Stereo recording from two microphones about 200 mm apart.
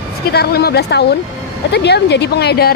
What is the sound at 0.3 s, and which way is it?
Speech, 50° left (ahead or behind).